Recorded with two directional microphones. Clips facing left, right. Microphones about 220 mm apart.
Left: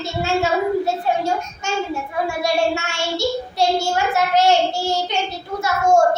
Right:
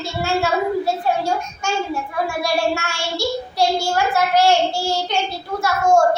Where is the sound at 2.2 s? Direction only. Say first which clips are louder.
Left 1 dB; 25° left (ahead or behind).